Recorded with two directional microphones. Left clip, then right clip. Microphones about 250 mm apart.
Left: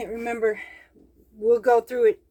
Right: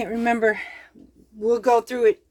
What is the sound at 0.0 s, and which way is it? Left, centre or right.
Speech, right.